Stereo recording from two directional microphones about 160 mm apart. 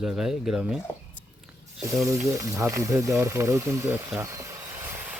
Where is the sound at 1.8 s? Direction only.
20° right (ahead or behind).